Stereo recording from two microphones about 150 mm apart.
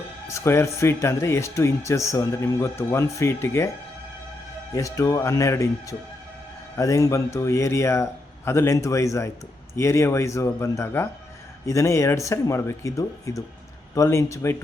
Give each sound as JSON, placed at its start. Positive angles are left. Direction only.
{"t": 0.3, "sound": "speech", "side_deg": 20}
{"t": 4.7, "sound": "speech", "side_deg": 20}